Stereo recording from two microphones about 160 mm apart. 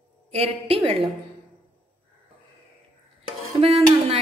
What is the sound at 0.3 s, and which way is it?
Speech, 35° right (ahead or behind).